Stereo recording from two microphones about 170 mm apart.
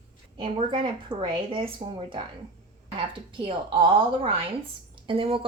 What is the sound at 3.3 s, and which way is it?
A woman's voice, 30° right (ahead or behind).